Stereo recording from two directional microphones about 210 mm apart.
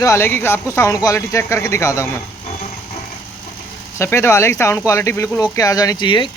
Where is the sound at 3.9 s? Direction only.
10° left (ahead or behind).